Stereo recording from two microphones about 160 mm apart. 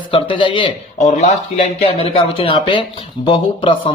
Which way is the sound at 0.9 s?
45° left (ahead or behind).